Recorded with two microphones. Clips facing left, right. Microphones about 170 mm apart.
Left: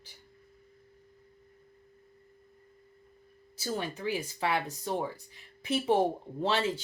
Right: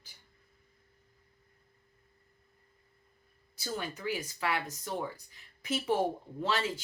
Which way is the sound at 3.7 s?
30° left (ahead or behind).